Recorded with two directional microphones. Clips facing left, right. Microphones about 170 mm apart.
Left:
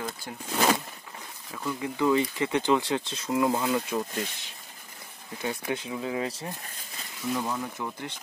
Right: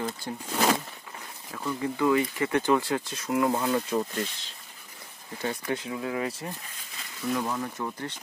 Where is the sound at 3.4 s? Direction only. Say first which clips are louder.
Even; 5° left (ahead or behind).